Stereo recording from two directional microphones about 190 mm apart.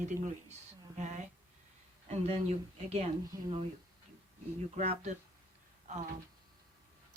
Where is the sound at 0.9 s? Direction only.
40° right (ahead or behind).